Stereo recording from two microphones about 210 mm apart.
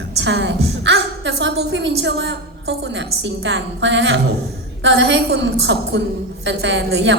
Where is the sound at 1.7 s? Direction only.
60° right (ahead or behind).